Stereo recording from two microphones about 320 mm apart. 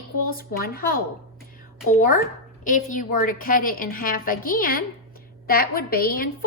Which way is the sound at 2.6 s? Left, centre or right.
Left.